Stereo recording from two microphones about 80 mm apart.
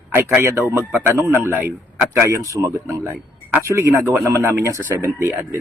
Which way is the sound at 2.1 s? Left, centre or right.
Right.